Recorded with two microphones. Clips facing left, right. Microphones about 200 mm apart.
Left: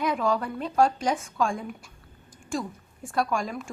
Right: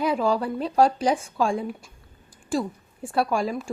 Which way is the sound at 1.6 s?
30° right (ahead or behind).